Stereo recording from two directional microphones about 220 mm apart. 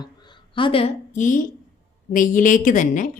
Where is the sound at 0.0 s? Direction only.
20° left (ahead or behind).